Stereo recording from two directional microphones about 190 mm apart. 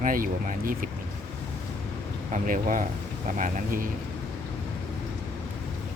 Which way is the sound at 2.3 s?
45° right (ahead or behind).